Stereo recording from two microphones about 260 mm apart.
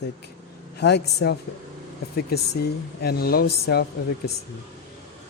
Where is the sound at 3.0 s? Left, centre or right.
Left.